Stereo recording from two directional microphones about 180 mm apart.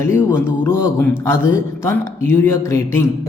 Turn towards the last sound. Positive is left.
turn(degrees=15)  # may be behind; listen again after turning